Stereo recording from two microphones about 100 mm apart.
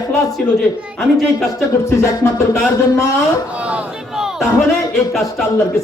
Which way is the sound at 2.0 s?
30° left (ahead or behind).